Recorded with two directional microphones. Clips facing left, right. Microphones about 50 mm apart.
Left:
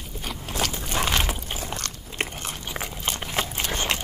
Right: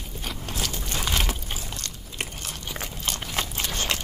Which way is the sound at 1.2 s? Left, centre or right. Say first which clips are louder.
Left 1 dB; centre.